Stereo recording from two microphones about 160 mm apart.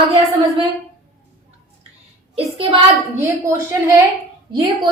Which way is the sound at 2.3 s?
35° right (ahead or behind).